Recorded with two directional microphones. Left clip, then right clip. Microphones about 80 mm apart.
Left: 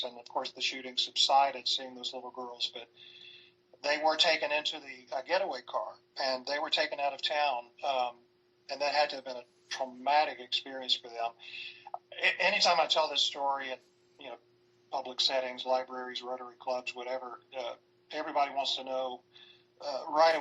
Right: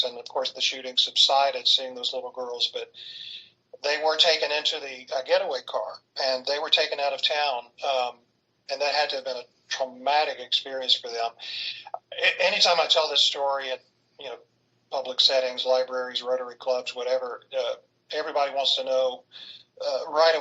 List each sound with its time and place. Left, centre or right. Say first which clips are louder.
0.0 s a man's voice: right 9 dB; right